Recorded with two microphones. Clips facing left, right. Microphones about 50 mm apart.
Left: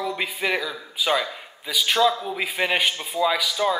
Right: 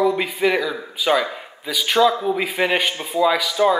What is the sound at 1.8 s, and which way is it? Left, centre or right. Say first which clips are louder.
A man's voice: right 3 dB; centre.